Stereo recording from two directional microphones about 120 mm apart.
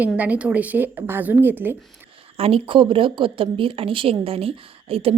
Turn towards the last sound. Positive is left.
turn(degrees=-55)  # may be behind; listen again after turning